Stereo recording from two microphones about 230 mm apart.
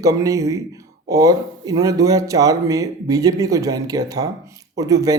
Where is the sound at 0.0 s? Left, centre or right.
Centre.